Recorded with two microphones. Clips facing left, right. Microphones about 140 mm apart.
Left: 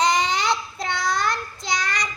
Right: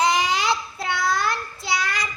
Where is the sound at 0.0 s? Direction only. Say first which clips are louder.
Even; 5° right (ahead or behind).